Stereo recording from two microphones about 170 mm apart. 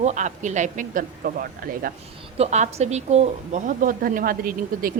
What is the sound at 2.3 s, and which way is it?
Speech, 40° right (ahead or behind).